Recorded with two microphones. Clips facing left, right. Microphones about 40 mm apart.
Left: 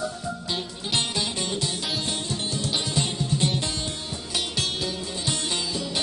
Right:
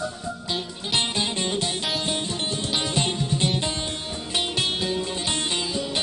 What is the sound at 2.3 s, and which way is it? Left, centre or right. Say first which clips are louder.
Music: right 1 dB; right.